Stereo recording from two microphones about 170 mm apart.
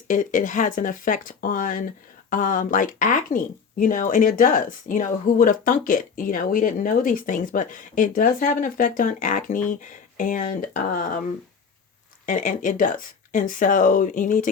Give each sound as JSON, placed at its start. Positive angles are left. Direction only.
{"t": 0.1, "sound": "speech", "side_deg": 50}
{"t": 12.2, "sound": "speech", "side_deg": 50}